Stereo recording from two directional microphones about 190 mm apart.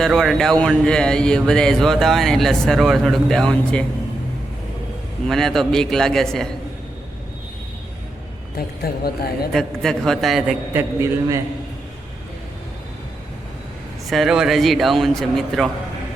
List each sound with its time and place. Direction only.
0.0 s speech: centre (ahead or behind)
5.3 s speech: centre (ahead or behind)
8.5 s speech: 55° left (ahead or behind)
9.5 s speech: centre (ahead or behind)
10.8 s a man's voice: 15° right (ahead or behind)
14.1 s speech: centre (ahead or behind)